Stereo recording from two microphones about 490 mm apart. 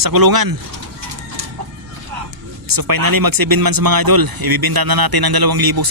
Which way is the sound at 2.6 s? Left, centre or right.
Right.